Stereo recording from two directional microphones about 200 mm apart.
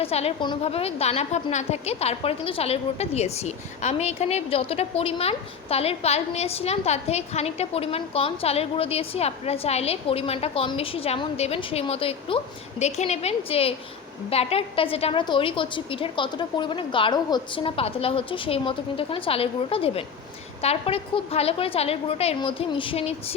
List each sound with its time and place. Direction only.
0.0 s a woman's voice: 30° left (ahead or behind)